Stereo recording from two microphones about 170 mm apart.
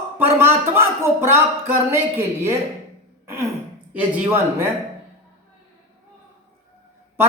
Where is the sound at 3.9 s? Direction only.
15° right (ahead or behind).